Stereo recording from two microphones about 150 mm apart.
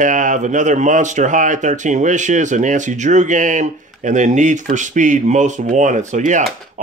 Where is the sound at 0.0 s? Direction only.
60° right (ahead or behind).